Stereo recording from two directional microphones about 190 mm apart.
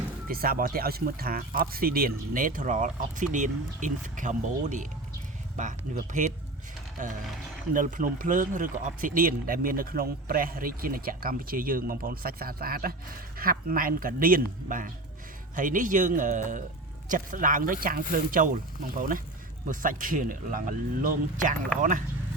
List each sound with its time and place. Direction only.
0.3 s speech: 50° right (ahead or behind)
7.0 s speech: 40° right (ahead or behind)